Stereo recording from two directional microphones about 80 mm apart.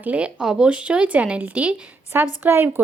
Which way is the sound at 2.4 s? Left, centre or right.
Right.